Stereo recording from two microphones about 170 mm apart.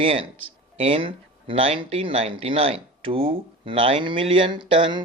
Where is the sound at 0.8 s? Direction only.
35° right (ahead or behind).